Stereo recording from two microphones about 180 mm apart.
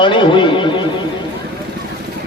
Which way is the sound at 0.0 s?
25° left (ahead or behind).